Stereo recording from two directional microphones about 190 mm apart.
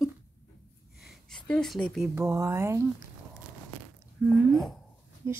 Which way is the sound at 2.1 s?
15° right (ahead or behind).